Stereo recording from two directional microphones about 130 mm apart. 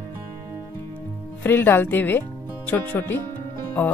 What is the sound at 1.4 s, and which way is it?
Speech, 15° left (ahead or behind).